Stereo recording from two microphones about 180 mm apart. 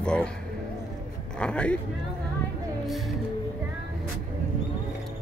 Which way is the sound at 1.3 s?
5° left (ahead or behind).